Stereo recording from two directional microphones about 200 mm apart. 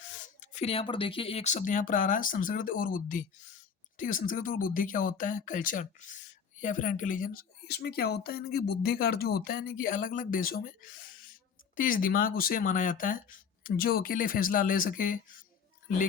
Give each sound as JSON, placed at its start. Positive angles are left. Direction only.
{"t": 0.3, "sound": "speech", "side_deg": 35}